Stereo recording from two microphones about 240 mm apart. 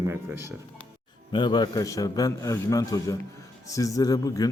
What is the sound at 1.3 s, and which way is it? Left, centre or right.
Speech, centre.